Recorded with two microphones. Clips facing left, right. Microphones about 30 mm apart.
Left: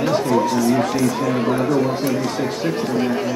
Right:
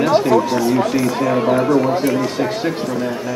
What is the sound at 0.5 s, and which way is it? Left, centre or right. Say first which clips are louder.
Speech: right 1 dB; centre.